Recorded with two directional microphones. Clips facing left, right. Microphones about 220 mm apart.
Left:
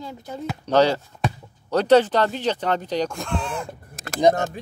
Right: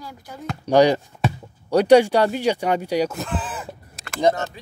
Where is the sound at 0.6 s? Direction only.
15° right (ahead or behind).